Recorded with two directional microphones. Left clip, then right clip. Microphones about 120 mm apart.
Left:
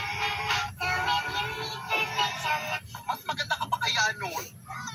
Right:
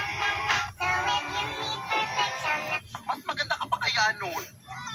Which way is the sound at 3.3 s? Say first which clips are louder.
Even; 30° right (ahead or behind).